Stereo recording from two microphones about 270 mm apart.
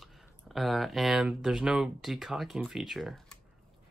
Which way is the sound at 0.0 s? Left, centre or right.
Centre.